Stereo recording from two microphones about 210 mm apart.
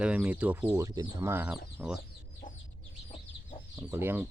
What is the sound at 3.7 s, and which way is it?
Speech, 10° right (ahead or behind).